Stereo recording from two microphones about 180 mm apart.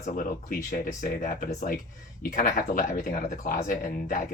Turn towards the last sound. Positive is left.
turn(degrees=45)  # may be behind; listen again after turning